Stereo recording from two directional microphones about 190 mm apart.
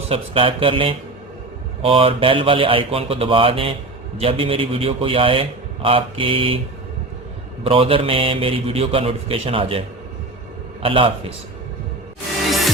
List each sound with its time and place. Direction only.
0.1 s a man's voice: 30° right (ahead or behind)
7.6 s a man's voice: 30° right (ahead or behind)
10.8 s a man's voice: 30° right (ahead or behind)